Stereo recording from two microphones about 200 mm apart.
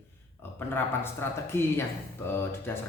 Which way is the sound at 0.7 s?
10° left (ahead or behind).